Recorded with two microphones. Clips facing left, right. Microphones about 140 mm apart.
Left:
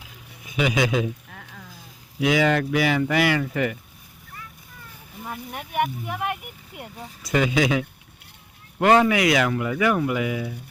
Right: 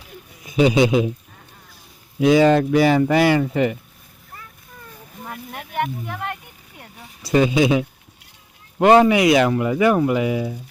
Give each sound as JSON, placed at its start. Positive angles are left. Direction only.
{"t": 0.5, "sound": "speech", "side_deg": -30}
{"t": 1.3, "sound": "rowboat", "side_deg": 85}
{"t": 2.2, "sound": "speech", "side_deg": -30}
{"t": 5.2, "sound": "speech", "side_deg": 5}
{"t": 7.2, "sound": "speech", "side_deg": -30}